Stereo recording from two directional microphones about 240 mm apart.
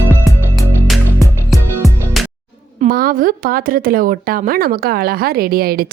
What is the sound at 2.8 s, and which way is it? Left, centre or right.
Speech, right.